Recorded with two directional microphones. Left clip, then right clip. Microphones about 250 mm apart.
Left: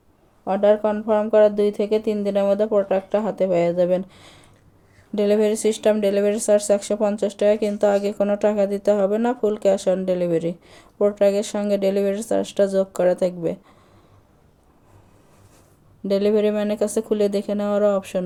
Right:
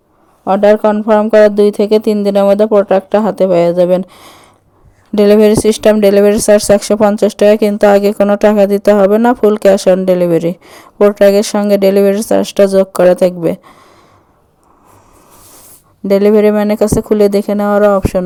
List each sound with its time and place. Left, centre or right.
0.4 s speech: right
16.0 s speech: right